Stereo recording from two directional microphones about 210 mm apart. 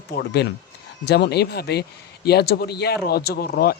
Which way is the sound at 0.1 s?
50° left (ahead or behind).